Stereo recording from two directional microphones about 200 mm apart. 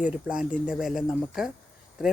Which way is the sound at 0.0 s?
5° right (ahead or behind).